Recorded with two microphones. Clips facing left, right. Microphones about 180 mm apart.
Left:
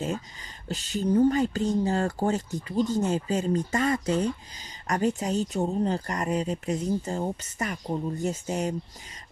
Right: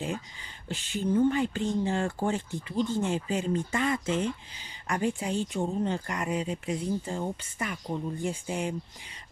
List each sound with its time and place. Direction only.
0.7 s speech: 40° left (ahead or behind)